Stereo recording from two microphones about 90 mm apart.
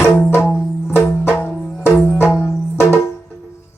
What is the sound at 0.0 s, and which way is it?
Music, 25° left (ahead or behind).